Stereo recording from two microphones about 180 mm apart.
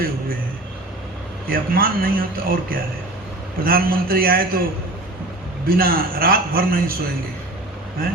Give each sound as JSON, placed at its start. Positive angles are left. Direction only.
{"t": 1.5, "sound": "a man's voice", "side_deg": -55}
{"t": 5.6, "sound": "a man's voice", "side_deg": -55}